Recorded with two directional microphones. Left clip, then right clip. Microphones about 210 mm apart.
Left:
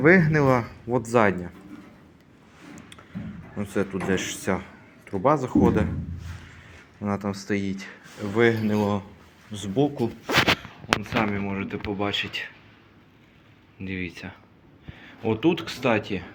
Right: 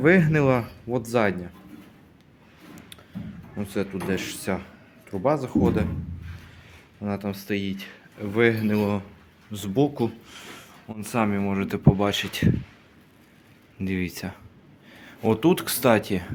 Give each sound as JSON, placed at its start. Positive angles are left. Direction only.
{"t": 0.0, "sound": "speech", "side_deg": -15}
{"t": 0.9, "sound": "speech", "side_deg": -5}
{"t": 3.6, "sound": "speech", "side_deg": -10}
{"t": 7.0, "sound": "speech", "side_deg": -10}
{"t": 7.4, "sound": "speech", "side_deg": -30}
{"t": 13.7, "sound": "speech", "side_deg": -35}